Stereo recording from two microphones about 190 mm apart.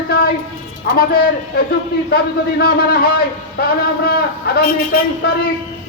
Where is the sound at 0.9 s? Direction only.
55° left (ahead or behind).